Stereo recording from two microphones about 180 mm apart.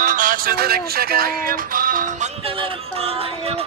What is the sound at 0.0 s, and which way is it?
Music, 45° right (ahead or behind).